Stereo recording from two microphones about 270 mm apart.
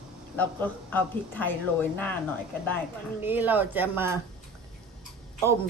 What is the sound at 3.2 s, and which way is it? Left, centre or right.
Speech, centre.